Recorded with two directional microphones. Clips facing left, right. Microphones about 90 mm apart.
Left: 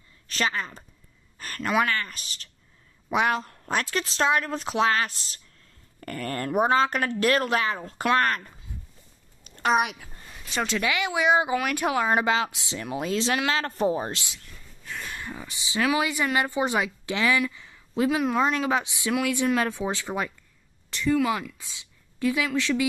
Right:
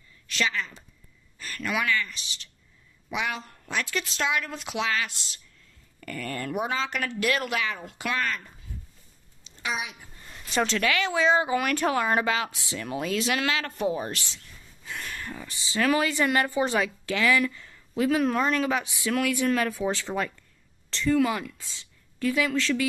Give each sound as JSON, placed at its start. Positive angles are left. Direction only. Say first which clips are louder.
{"t": 0.3, "sound": "a woman's voice", "louder": "left 1 dB", "side_deg": 40}
{"t": 8.2, "sound": "speech", "louder": "left 5 dB", "side_deg": 50}
{"t": 9.4, "sound": "a sound", "louder": "left 9 dB", "side_deg": 50}
{"t": 10.5, "sound": "speech", "louder": "right 2 dB", "side_deg": 0}
{"t": 10.8, "sound": "a woman's voice", "louder": "left 2 dB", "side_deg": 15}
{"t": 15.0, "sound": "speech", "louder": "left 1 dB", "side_deg": 15}
{"t": 17.4, "sound": "a sound", "louder": "right 1 dB", "side_deg": 15}
{"t": 18.1, "sound": "speech", "louder": "right 1 dB", "side_deg": 10}
{"t": 21.5, "sound": "speech", "louder": "even", "side_deg": 15}